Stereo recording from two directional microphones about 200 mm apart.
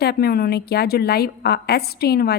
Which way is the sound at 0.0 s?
50° left (ahead or behind).